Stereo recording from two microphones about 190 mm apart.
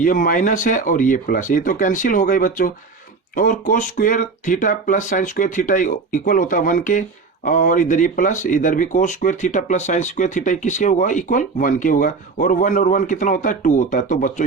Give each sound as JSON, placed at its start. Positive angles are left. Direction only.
{"t": 0.0, "sound": "speech", "side_deg": 45}